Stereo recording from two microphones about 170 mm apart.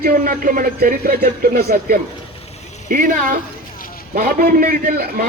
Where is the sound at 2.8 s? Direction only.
50° right (ahead or behind).